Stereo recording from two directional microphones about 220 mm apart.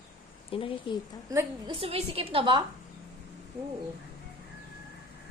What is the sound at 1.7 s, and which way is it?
Speech, 25° right (ahead or behind).